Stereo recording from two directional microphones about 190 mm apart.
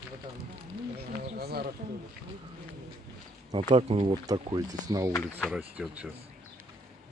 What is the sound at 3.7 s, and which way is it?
Speech, 30° right (ahead or behind).